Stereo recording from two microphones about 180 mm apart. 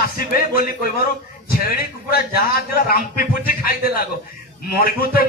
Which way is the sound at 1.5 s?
55° left (ahead or behind).